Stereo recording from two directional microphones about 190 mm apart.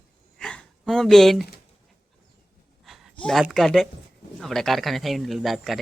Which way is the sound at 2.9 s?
Centre (ahead or behind).